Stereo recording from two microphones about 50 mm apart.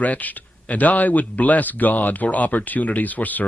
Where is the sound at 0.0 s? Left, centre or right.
Left.